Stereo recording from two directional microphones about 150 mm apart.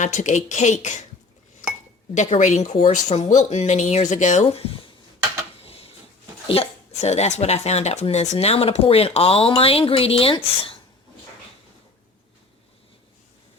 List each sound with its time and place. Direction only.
0.0 s speech: 55° left (ahead or behind)
2.1 s speech: 50° left (ahead or behind)
5.6 s a sound: 40° left (ahead or behind)
6.5 s a woman's voice: 45° left (ahead or behind)